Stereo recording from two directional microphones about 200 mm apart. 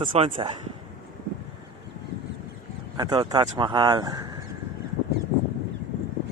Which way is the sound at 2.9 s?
20° right (ahead or behind).